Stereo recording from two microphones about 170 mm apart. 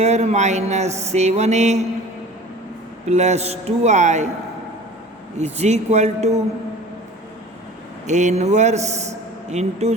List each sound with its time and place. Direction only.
0.0 s speech: 40° right (ahead or behind)
3.1 s speech: 40° right (ahead or behind)
5.4 s speech: 40° right (ahead or behind)
8.0 s a man's voice: 45° right (ahead or behind)